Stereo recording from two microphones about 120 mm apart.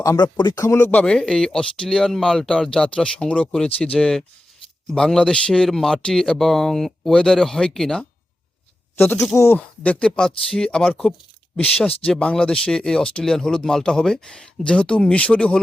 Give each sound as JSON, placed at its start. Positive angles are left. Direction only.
{"t": 0.0, "sound": "a man's voice", "side_deg": 30}
{"t": 9.0, "sound": "speech", "side_deg": 20}
{"t": 9.6, "sound": "speech", "side_deg": 10}